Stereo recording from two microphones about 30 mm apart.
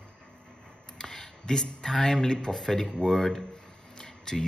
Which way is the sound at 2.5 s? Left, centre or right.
Centre.